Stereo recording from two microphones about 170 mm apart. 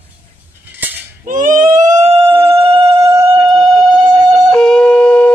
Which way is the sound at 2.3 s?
15° right (ahead or behind).